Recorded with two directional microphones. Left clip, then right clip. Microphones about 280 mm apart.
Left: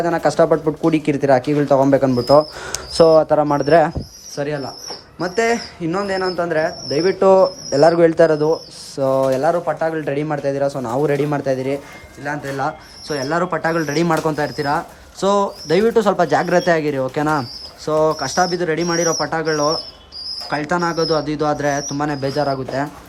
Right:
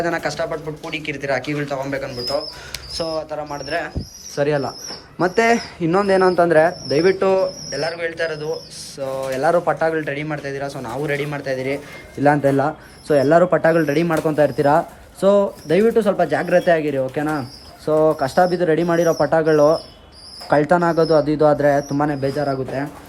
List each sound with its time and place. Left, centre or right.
0.0 s speech: centre
3.7 s speech: left
4.4 s speech: centre
9.4 s speech: centre
12.2 s speech: centre